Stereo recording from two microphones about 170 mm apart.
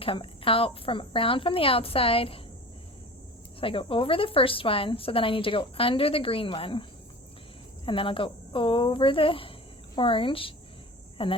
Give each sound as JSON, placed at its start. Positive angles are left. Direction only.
{"t": 0.0, "sound": "a woman's voice", "side_deg": 30}
{"t": 3.6, "sound": "a woman's voice", "side_deg": 30}
{"t": 7.9, "sound": "a woman's voice", "side_deg": 30}